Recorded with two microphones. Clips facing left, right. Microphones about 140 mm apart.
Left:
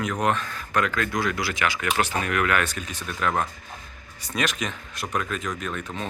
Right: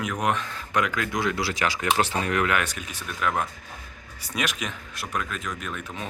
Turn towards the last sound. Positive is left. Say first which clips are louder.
# left 3 dB
turn(degrees=-10)  # may be behind; listen again after turning